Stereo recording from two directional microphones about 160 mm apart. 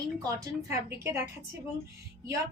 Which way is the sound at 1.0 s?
15° right (ahead or behind).